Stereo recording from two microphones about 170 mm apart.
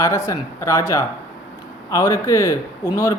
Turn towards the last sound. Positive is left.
turn(degrees=20)  # may be behind; listen again after turning